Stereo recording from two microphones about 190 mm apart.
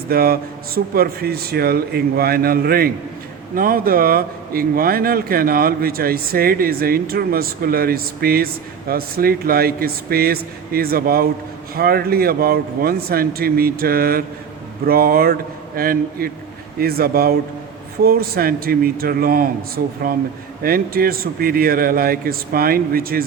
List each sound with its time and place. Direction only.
0.1 s a man's voice: 50° right (ahead or behind)